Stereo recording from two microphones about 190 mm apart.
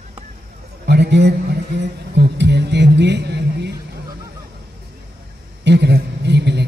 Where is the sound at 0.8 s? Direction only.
60° right (ahead or behind).